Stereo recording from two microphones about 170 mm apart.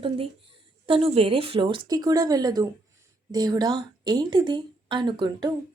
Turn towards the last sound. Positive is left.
turn(degrees=-25)  # may be behind; listen again after turning